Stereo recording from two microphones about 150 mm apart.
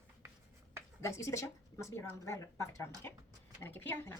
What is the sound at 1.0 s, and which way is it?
A woman's voice, 20° left (ahead or behind).